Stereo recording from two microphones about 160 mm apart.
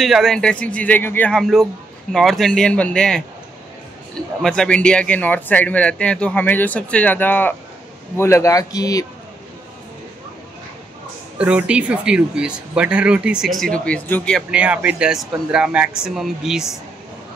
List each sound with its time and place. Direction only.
0.0 s speech: centre (ahead or behind)
4.4 s speech: 5° left (ahead or behind); by 9.0 s 20° left (ahead or behind)
11.3 s speech: 5° right (ahead or behind); by 14.4 s 10° left (ahead or behind)
14.5 s speech: 10° right (ahead or behind)